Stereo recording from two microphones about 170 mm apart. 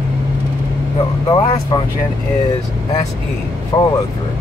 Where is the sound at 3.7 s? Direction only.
20° left (ahead or behind).